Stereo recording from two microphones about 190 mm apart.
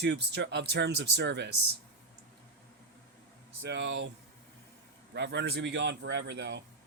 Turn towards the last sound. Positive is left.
turn(degrees=-65)  # may be behind; listen again after turning